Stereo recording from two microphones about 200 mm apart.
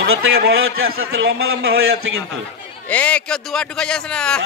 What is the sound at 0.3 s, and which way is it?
Speech, 50° right (ahead or behind).